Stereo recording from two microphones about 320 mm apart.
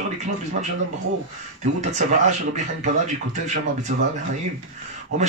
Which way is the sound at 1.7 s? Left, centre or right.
Right.